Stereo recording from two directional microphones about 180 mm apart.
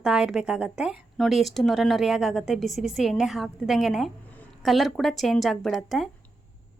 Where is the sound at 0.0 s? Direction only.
5° right (ahead or behind).